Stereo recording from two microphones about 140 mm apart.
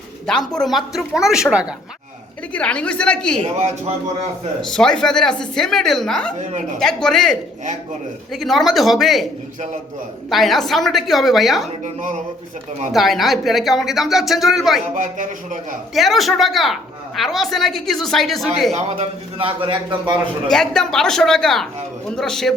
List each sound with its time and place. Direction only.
0.3 s speech: 5° left (ahead or behind)
2.5 s a woman's voice: 10° left (ahead or behind)
3.4 s a man's voice: 50° right (ahead or behind)
4.6 s speech: 5° left (ahead or behind)
6.4 s a woman's voice: 60° right (ahead or behind)
6.7 s speech: 5° left (ahead or behind)
12.9 s speech: centre (ahead or behind)
14.9 s a man's voice: 65° right (ahead or behind)
16.0 s speech: centre (ahead or behind)
18.7 s a man's voice: 50° right (ahead or behind)
20.5 s speech: 5° left (ahead or behind)